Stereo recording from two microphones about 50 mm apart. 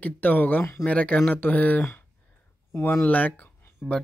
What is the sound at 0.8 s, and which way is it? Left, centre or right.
Speech, left.